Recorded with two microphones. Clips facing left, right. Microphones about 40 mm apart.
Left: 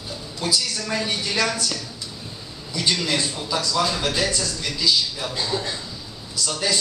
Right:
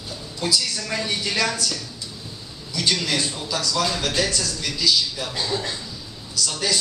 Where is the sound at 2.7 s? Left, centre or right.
Left.